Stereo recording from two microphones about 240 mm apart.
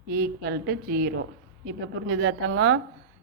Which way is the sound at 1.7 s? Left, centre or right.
Right.